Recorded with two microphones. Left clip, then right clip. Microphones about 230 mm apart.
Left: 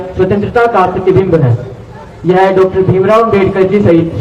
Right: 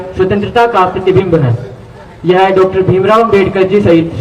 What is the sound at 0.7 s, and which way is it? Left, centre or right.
A man's voice, right.